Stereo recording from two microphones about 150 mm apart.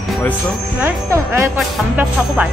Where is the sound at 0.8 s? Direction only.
15° right (ahead or behind).